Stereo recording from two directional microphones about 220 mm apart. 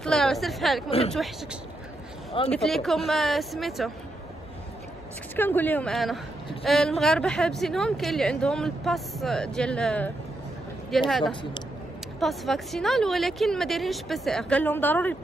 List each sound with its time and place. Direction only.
0.0 s a woman's voice: centre (ahead or behind)
0.8 s speech: 25° left (ahead or behind)
1.1 s speech: centre (ahead or behind)
5.3 s a woman's voice: 10° left (ahead or behind)